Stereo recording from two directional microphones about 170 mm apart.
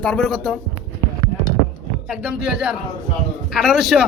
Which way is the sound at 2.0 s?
5° right (ahead or behind).